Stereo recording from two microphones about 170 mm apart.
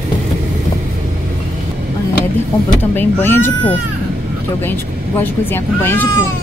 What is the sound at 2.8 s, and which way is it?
Speech, 10° left (ahead or behind).